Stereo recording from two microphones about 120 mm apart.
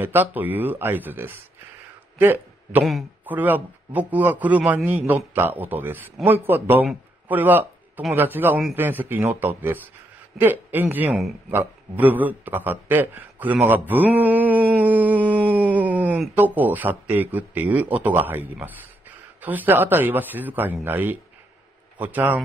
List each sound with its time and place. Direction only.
0.0 s a man's voice: 15° right (ahead or behind)
2.8 s speech: centre (ahead or behind)
3.3 s a man's voice: 15° right (ahead or behind)
7.2 s a sound: 15° right (ahead or behind)
8.1 s a man's voice: 15° right (ahead or behind)